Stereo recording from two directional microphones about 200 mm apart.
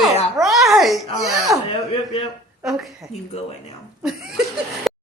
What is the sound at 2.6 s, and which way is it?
A woman's voice, centre (ahead or behind).